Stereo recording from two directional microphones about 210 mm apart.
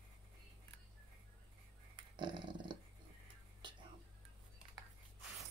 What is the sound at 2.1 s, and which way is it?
Dog, 20° right (ahead or behind).